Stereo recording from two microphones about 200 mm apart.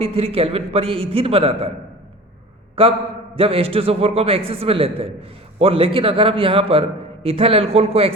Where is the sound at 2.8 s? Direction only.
30° right (ahead or behind).